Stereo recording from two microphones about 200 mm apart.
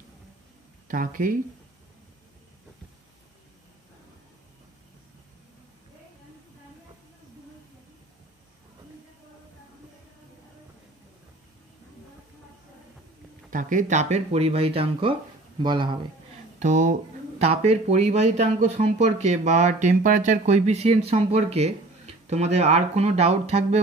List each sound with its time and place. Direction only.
0.8 s speech: 40° right (ahead or behind)
13.5 s a man's voice: 40° right (ahead or behind); by 16.0 s 20° right (ahead or behind)
16.6 s speech: 40° right (ahead or behind)